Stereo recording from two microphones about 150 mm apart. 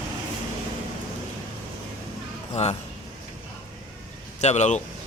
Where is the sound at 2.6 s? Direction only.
50° left (ahead or behind).